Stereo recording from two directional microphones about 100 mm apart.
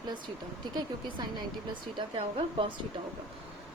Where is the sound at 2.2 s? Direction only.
75° right (ahead or behind).